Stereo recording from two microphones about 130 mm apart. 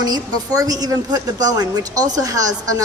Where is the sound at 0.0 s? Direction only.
30° right (ahead or behind).